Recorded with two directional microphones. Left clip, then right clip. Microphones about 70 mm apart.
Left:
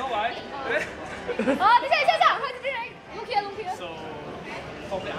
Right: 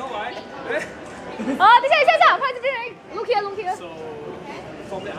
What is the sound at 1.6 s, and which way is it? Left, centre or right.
Chatter, right.